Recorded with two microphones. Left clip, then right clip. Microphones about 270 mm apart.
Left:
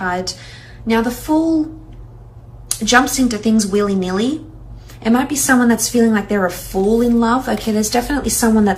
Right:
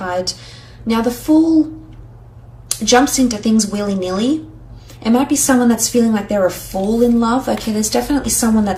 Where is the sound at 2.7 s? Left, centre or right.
Centre.